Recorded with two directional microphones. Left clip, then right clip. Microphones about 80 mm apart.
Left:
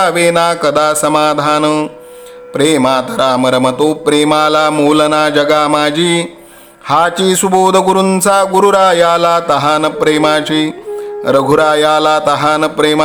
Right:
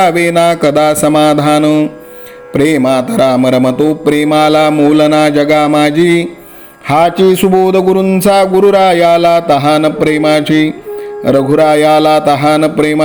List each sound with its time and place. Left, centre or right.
0.0 s speech: right
4.1 s mantra: right
4.9 s speech: right
7.2 s a sound: centre
8.2 s speech: right
10.4 s music: centre
11.3 s speech: centre